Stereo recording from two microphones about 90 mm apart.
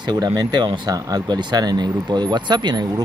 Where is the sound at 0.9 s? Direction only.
45° right (ahead or behind).